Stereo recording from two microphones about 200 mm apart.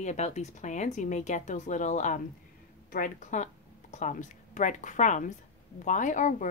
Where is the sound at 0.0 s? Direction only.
35° left (ahead or behind).